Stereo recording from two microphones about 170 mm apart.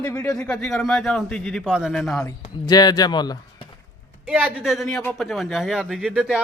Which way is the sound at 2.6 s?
25° left (ahead or behind).